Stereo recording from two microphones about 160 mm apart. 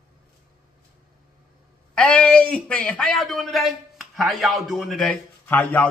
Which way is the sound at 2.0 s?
10° left (ahead or behind).